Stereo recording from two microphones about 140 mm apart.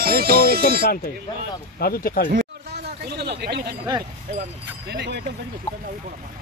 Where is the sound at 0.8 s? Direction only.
80° left.